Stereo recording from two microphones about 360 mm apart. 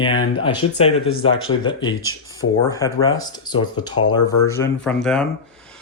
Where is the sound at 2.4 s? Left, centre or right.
Left.